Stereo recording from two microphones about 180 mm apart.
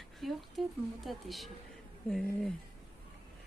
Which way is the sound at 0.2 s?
Centre (ahead or behind).